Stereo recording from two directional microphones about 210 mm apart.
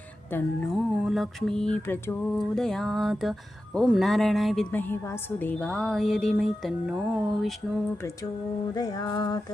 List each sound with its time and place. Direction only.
0.3 s music: 10° left (ahead or behind)
0.8 s a woman's voice: centre (ahead or behind)
8.7 s music: 20° left (ahead or behind)